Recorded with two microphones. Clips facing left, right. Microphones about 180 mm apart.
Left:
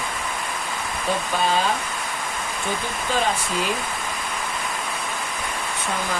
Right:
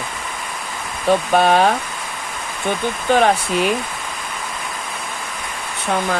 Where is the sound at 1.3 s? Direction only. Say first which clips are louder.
Right 8 dB; 65° right (ahead or behind).